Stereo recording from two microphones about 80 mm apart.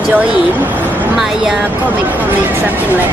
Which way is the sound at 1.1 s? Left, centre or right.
Centre.